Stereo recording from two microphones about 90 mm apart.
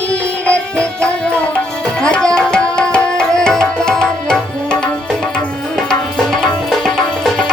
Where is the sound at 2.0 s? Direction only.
10° left (ahead or behind).